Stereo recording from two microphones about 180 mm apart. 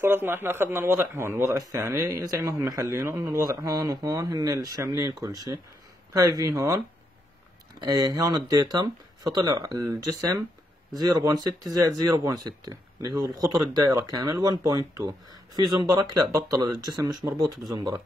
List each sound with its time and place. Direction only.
0.0 s a man's voice: 10° right (ahead or behind)
7.8 s speech: 20° right (ahead or behind)